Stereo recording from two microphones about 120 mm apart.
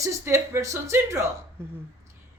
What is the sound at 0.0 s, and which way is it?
A woman's voice, 25° right (ahead or behind).